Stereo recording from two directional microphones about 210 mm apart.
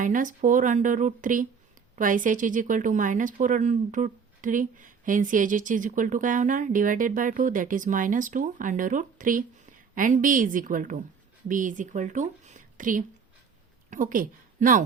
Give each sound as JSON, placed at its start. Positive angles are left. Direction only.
{"t": 0.0, "sound": "a woman's voice", "side_deg": -40}